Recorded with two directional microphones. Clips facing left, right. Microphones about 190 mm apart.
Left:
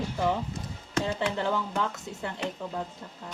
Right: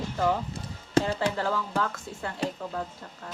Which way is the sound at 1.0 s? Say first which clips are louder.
Right 5 dB; 35° right (ahead or behind).